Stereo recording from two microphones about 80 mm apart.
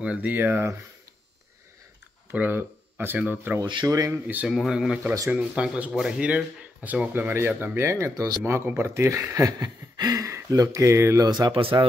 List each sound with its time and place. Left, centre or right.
0.0 s speech: centre
2.3 s speech: right
3.8 s speech: right
4.1 s speech: right
4.5 s speech: centre; by 8.1 s right
8.1 s speech: right
8.5 s speech: right
11.1 s speech: right